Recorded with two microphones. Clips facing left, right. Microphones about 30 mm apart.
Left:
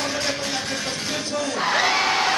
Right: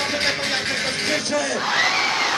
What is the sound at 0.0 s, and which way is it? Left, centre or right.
Music, right.